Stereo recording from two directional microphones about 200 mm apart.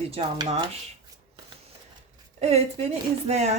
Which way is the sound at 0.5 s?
30° right (ahead or behind).